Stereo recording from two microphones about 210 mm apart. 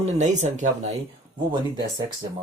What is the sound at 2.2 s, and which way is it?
Speech, 20° right (ahead or behind).